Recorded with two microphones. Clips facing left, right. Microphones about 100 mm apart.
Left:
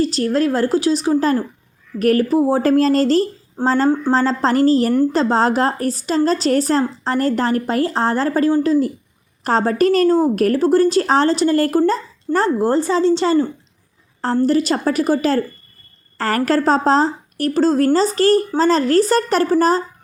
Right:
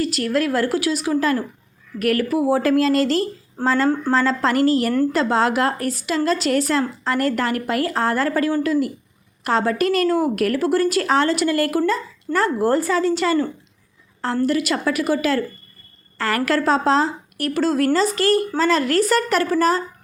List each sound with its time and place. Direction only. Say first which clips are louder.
0.0 s a woman's voice: left 4 dB; 30° left (ahead or behind)